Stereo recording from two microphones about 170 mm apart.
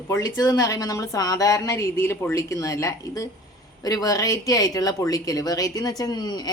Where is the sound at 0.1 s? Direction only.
20° left (ahead or behind).